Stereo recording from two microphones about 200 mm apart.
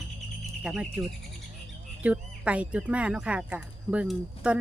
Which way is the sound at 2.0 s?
5° right (ahead or behind).